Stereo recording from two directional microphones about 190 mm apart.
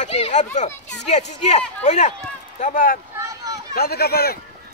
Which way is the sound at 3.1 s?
15° right (ahead or behind).